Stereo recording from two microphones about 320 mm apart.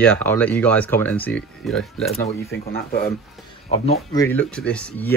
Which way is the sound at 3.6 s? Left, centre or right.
Centre.